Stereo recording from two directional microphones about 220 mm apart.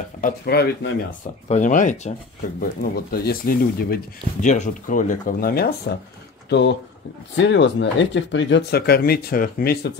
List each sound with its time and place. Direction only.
0.2 s speech: 45° left (ahead or behind)